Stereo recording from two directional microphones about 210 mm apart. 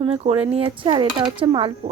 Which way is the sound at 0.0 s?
30° right (ahead or behind).